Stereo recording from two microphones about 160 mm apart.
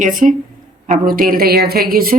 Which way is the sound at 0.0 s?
55° right (ahead or behind).